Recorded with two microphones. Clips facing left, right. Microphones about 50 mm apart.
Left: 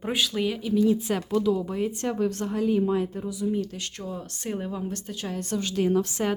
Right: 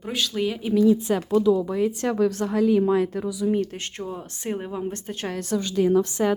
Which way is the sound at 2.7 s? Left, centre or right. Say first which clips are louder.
Right 4 dB; right.